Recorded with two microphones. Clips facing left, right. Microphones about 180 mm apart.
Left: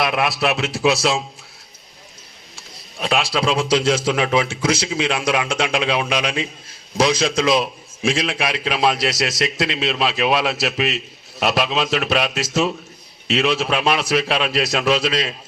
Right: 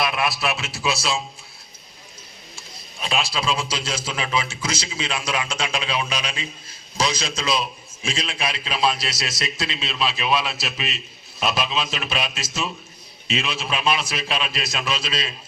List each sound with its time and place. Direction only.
0.0 s a man's voice: 65° left (ahead or behind)
3.0 s a man's voice: 65° left (ahead or behind)